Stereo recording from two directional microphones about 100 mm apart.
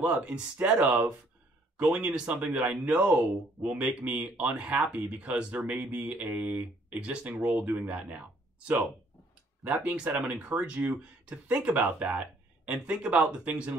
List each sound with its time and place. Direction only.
0.0 s speech: 10° right (ahead or behind)